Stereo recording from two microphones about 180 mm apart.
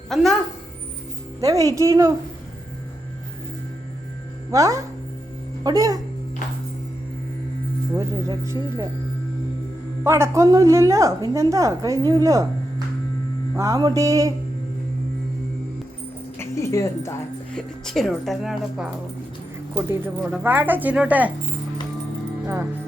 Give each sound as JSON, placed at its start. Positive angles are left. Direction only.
{"t": 0.1, "sound": "speech", "side_deg": 0}
{"t": 1.4, "sound": "a woman's voice", "side_deg": -20}
{"t": 4.5, "sound": "music", "side_deg": -20}
{"t": 7.9, "sound": "music", "side_deg": -20}
{"t": 10.0, "sound": "a woman's voice", "side_deg": -15}
{"t": 13.6, "sound": "music", "side_deg": -20}
{"t": 16.4, "sound": "music", "side_deg": 15}
{"t": 17.8, "sound": "speech", "side_deg": 0}
{"t": 19.7, "sound": "a woman's voice", "side_deg": -10}